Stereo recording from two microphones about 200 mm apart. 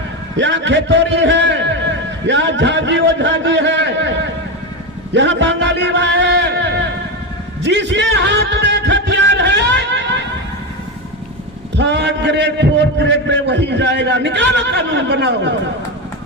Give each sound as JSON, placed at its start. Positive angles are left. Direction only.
{"t": 0.3, "sound": "a man's voice", "side_deg": -65}
{"t": 7.6, "sound": "music", "side_deg": -60}
{"t": 11.8, "sound": "a man's voice", "side_deg": -60}